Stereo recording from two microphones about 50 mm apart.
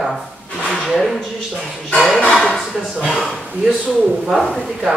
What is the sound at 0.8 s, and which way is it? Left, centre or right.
A man's voice, centre.